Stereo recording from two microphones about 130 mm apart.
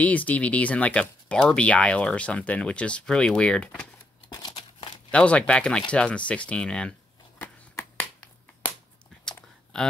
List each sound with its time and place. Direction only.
0.0 s speech: 10° left (ahead or behind)
4.3 s crumpling: 35° left (ahead or behind)
5.1 s speech: 10° left (ahead or behind)